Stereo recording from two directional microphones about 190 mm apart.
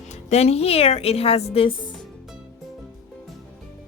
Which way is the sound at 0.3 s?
35° left (ahead or behind).